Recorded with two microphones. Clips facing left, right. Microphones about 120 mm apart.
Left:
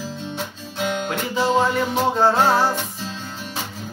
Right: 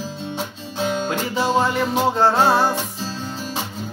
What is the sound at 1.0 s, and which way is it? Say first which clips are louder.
Music: even; centre (ahead or behind).